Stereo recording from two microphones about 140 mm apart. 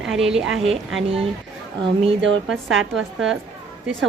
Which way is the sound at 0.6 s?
40° right (ahead or behind).